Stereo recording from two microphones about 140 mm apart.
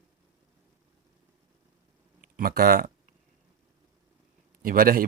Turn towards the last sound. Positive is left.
turn(degrees=-90)